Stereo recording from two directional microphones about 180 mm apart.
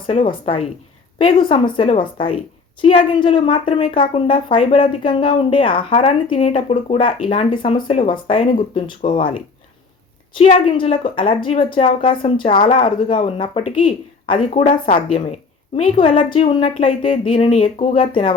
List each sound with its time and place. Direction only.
0.1 s speech: 30° left (ahead or behind)
10.5 s speech: 30° left (ahead or behind)